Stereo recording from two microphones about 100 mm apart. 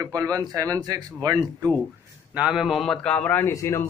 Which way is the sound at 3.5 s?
30° left (ahead or behind).